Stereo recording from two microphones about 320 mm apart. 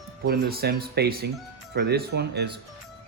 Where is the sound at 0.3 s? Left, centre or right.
Right.